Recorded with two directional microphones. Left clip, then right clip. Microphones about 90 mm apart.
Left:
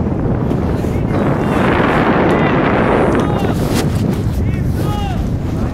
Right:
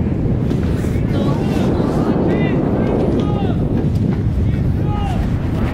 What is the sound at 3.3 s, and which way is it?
Wind noise, 40° right (ahead or behind).